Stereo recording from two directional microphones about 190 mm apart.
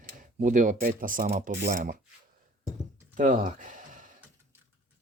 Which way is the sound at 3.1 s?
40° right (ahead or behind).